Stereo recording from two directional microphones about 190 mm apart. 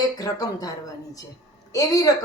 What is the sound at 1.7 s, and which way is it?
Speech, 20° left (ahead or behind).